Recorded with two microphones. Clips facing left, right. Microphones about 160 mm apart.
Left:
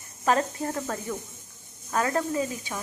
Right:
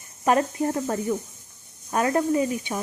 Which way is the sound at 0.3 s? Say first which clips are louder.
Right 4 dB; 20° right (ahead or behind).